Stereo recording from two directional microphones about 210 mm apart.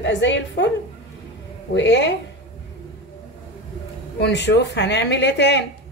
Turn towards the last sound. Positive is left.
turn(degrees=55)  # may be behind; listen again after turning